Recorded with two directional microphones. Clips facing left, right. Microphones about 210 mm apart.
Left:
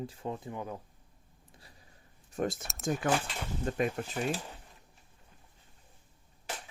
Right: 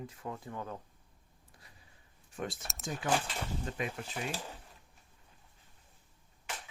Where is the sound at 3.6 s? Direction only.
45° left (ahead or behind).